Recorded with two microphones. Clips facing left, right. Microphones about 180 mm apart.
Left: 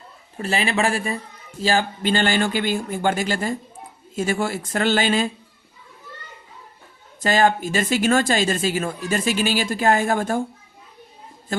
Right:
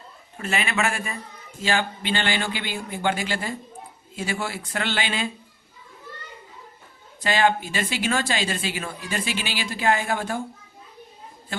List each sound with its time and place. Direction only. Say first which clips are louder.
0.3 s speech: left 4 dB; 35° left (ahead or behind)
7.2 s speech: left 3 dB; 45° left (ahead or behind)